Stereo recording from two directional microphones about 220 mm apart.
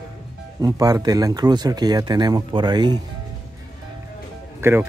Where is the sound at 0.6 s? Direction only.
15° right (ahead or behind).